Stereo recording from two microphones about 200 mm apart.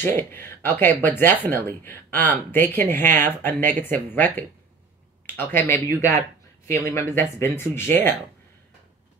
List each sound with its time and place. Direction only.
0.0 s speech: 10° left (ahead or behind)